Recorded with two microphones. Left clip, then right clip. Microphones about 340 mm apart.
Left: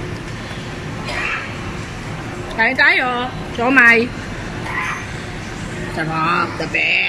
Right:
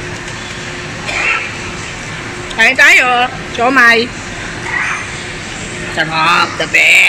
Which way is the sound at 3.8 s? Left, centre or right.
Right.